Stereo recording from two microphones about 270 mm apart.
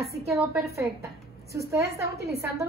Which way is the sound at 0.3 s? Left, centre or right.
Centre.